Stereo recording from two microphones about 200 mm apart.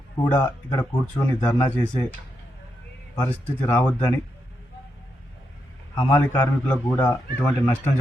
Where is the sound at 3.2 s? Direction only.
10° left (ahead or behind).